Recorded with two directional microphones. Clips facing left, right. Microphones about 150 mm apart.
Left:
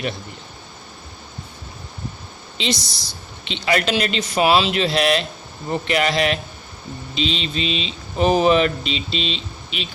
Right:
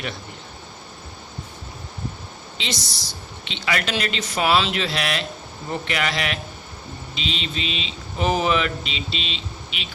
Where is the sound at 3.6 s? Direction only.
30° left (ahead or behind).